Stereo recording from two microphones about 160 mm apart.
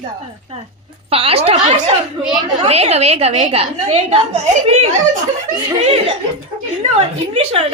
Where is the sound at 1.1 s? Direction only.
40° right (ahead or behind).